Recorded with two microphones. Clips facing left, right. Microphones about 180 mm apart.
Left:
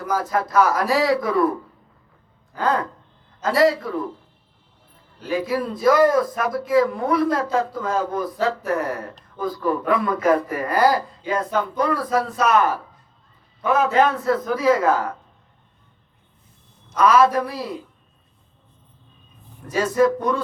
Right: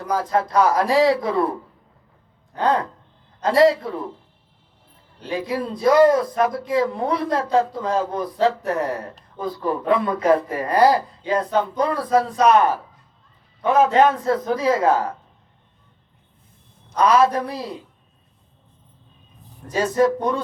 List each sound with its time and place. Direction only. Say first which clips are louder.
0.0 s speech: right 1 dB; 30° right (ahead or behind)
3.4 s speech: right 2 dB; 30° right (ahead or behind)
5.2 s speech: left 2 dB; 30° right (ahead or behind)
17.0 s speech: left 1 dB; 30° right (ahead or behind)
19.7 s speech: even; 30° right (ahead or behind)